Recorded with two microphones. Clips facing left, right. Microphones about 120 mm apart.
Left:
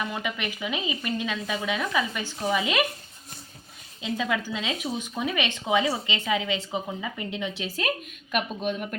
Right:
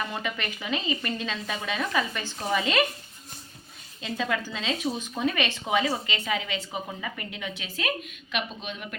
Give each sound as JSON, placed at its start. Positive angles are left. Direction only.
{"t": 0.1, "sound": "speech", "side_deg": 10}
{"t": 4.0, "sound": "a woman's voice", "side_deg": 15}